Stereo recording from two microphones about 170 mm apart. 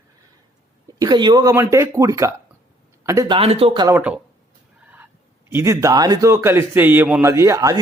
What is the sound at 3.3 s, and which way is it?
Speech, 35° right (ahead or behind).